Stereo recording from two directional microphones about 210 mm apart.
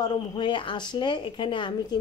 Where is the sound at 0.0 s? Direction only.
20° left (ahead or behind).